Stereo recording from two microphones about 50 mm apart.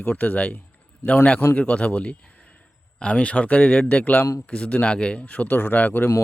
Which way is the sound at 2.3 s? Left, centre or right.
Left.